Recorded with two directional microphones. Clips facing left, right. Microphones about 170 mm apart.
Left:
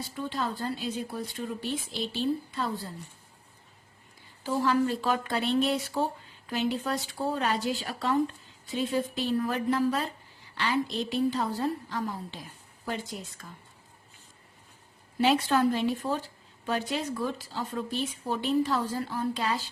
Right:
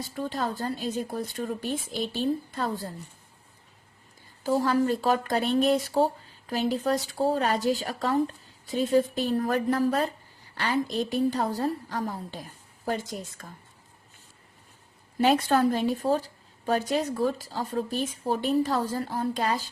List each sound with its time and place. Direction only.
0.1 s a woman's voice: 45° right (ahead or behind)
4.4 s a woman's voice: 40° right (ahead or behind)
15.2 s a woman's voice: 45° right (ahead or behind)